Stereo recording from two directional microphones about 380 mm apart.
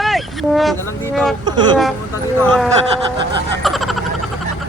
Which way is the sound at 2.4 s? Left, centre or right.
Centre.